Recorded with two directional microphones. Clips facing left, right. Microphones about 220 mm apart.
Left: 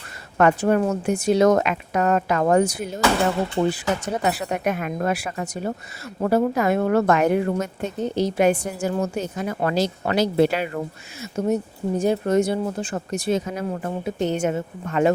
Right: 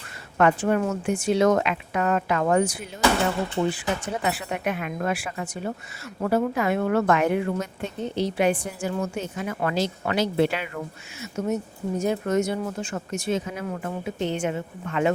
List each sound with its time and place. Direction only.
0.3 s a woman's voice: 40° left (ahead or behind)